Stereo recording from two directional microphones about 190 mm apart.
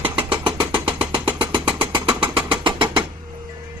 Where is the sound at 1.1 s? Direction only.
25° right (ahead or behind).